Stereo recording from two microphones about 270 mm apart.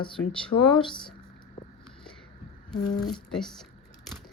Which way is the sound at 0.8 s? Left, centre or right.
Centre.